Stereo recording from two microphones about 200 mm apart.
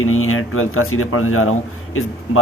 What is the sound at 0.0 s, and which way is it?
A man's voice, 90° left.